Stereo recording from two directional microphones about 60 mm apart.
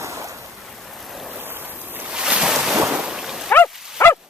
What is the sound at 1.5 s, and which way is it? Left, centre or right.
Boat, right.